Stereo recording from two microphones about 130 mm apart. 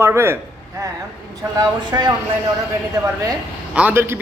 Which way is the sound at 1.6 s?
30° right (ahead or behind).